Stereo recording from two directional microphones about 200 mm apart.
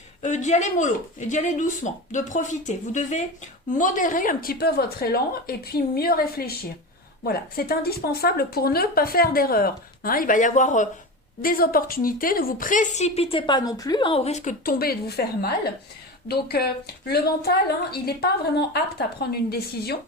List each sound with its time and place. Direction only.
0.2 s a woman's voice: 35° left (ahead or behind); by 20.0 s 50° left (ahead or behind)